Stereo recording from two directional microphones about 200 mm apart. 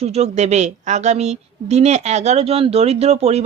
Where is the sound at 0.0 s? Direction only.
30° right (ahead or behind).